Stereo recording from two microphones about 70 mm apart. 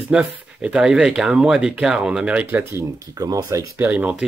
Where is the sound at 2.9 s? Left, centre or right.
Right.